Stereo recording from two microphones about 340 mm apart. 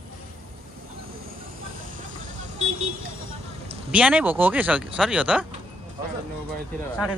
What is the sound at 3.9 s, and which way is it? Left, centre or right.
Speech, centre.